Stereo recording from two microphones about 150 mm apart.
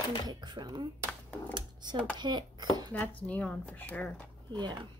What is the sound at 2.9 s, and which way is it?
Speech, 10° left (ahead or behind).